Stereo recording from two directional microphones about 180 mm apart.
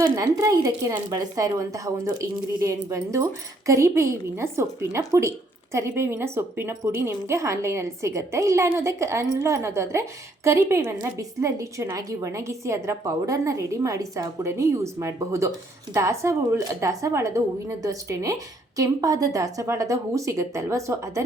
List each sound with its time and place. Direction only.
0.0 s a woman's voice: 20° right (ahead or behind)